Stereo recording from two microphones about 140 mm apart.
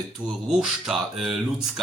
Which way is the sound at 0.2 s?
30° right (ahead or behind).